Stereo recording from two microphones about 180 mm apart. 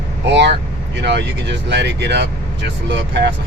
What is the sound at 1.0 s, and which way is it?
Speech, 70° right (ahead or behind).